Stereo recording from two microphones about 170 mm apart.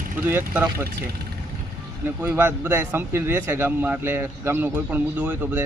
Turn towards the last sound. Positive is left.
turn(degrees=-10)  # may be behind; listen again after turning